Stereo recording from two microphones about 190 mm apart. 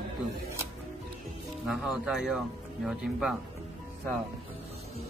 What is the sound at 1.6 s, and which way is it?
Speech, 5° right (ahead or behind).